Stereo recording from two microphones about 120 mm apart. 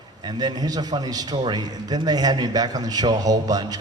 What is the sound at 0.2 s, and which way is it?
A man's voice, 35° right (ahead or behind).